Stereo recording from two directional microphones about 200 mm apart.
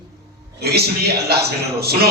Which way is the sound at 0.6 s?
50° right (ahead or behind).